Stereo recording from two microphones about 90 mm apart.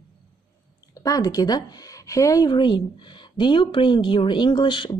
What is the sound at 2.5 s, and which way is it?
A woman's voice, 55° left (ahead or behind).